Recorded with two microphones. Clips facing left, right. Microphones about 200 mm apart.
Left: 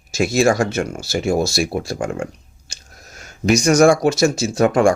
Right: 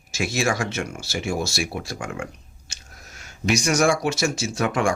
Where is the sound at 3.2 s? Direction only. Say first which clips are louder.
Left 6 dB; 40° left (ahead or behind).